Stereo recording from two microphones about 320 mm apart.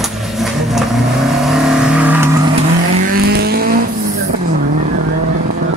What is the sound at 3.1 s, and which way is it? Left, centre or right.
Vehicle, right.